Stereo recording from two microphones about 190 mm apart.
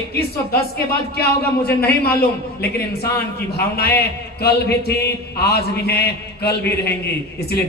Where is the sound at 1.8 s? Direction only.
55° left (ahead or behind).